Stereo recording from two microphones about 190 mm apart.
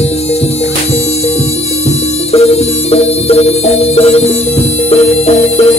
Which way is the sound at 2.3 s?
30° left (ahead or behind).